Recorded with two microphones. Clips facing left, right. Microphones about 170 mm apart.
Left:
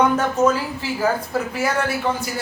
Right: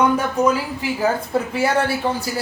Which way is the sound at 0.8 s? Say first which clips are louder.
Right 4 dB; 15° right (ahead or behind).